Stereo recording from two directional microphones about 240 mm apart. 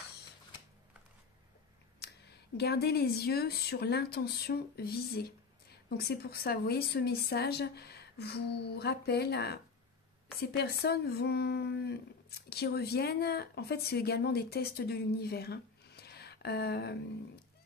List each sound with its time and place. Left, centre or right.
2.5 s a woman's voice: left